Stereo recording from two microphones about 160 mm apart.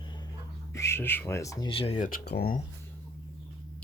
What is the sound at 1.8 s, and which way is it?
Speech, 40° left (ahead or behind).